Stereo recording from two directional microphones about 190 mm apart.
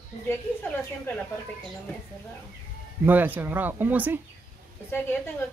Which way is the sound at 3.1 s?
10° right (ahead or behind).